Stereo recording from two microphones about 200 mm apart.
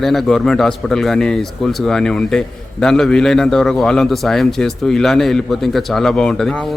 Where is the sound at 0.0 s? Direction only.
Centre (ahead or behind).